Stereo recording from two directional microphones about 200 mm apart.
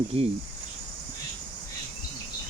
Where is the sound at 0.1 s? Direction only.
30° right (ahead or behind).